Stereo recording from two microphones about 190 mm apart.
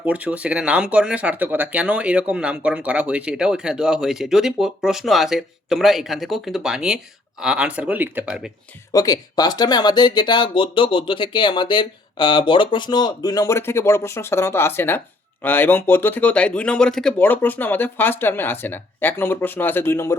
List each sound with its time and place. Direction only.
0.0 s speech: 5° right (ahead or behind)
8.9 s speech: 20° left (ahead or behind)